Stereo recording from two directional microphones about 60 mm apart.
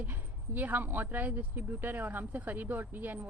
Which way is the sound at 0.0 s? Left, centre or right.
Right.